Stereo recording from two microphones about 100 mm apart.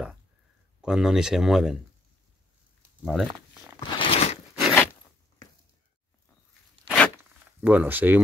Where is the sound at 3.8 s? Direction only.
65° left (ahead or behind); by 4.4 s 90° left.